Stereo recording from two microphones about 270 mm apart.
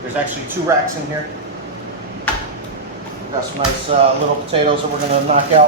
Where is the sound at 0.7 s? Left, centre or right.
Centre.